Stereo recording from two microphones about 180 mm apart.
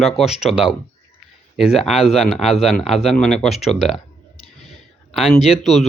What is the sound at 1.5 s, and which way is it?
Speech, centre (ahead or behind).